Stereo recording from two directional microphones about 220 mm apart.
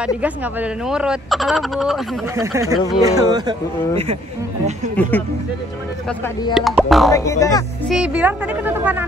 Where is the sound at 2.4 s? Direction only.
15° right (ahead or behind).